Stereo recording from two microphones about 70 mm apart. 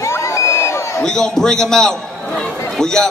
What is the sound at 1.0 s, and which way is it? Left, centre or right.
A man's voice, centre.